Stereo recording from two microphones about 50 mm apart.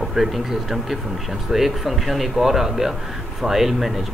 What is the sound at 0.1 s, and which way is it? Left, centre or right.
Speech, centre.